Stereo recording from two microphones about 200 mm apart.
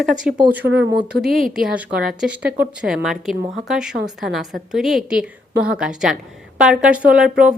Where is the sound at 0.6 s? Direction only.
60° right (ahead or behind).